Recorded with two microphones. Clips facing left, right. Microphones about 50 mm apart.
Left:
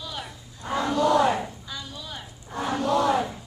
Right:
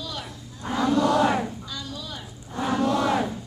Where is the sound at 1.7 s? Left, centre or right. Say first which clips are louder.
Right 2 dB; centre.